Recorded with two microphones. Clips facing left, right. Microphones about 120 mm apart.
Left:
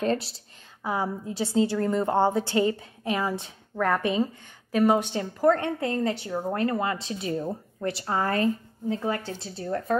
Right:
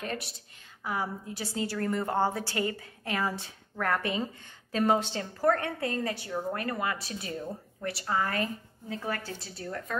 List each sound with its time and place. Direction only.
0.0 s a woman's voice: 30° left (ahead or behind)